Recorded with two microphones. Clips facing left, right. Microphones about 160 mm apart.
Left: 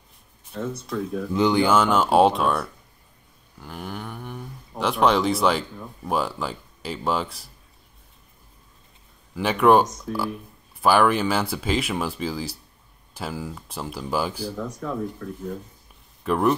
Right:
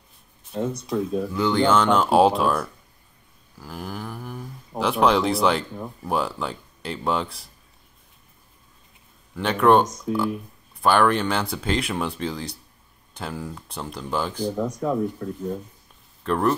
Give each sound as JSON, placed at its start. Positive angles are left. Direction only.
{"t": 0.5, "sound": "speech", "side_deg": -15}
{"t": 1.3, "sound": "speech", "side_deg": 15}
{"t": 9.3, "sound": "speech", "side_deg": 5}
{"t": 14.5, "sound": "speech", "side_deg": -20}
{"t": 16.3, "sound": "speech", "side_deg": 5}